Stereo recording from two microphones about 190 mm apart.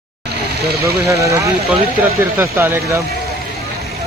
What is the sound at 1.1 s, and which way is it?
Speech, 15° right (ahead or behind).